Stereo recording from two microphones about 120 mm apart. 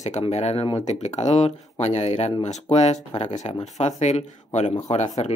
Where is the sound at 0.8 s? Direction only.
70° left (ahead or behind).